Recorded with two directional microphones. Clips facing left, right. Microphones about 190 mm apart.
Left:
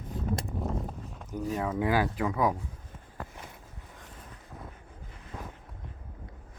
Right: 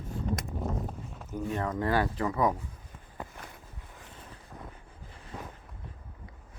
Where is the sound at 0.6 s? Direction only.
Centre (ahead or behind).